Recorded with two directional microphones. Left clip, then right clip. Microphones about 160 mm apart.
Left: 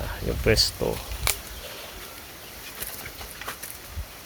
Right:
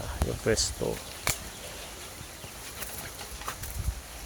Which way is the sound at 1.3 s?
65° left (ahead or behind).